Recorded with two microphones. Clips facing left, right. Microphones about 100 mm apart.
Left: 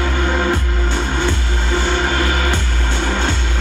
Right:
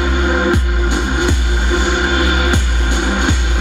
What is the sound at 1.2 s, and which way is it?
Music, 15° right (ahead or behind).